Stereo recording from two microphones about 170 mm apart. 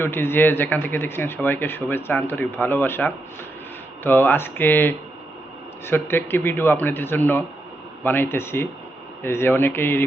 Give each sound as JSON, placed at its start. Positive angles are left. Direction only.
{"t": 0.0, "sound": "speech", "side_deg": 15}